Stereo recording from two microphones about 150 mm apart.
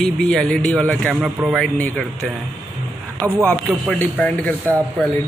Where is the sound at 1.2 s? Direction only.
10° right (ahead or behind).